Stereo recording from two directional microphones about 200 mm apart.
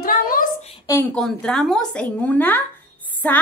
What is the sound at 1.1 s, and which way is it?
A child's voice, 5° left (ahead or behind).